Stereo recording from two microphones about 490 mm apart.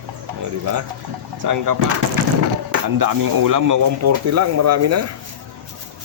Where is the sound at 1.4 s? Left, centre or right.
Right.